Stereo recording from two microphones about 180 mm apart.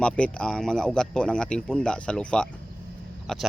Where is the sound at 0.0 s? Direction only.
5° left (ahead or behind).